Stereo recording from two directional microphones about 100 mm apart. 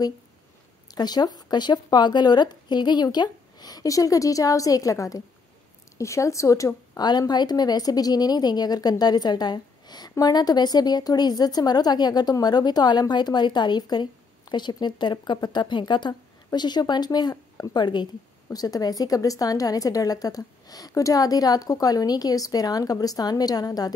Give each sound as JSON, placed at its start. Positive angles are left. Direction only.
{"t": 0.8, "sound": "a woman's voice", "side_deg": 45}